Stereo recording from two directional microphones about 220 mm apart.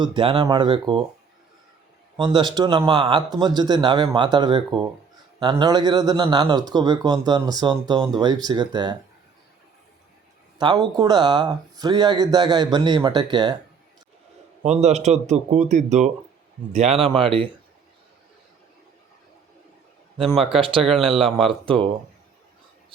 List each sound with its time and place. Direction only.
0.0 s speech: 20° right (ahead or behind)
2.1 s speech: 20° right (ahead or behind)
10.6 s speech: 20° right (ahead or behind)
14.6 s speech: 30° right (ahead or behind)
20.2 s speech: centre (ahead or behind)
20.5 s speech: 25° right (ahead or behind)
20.8 s speech: centre (ahead or behind)
21.4 s speech: 25° right (ahead or behind)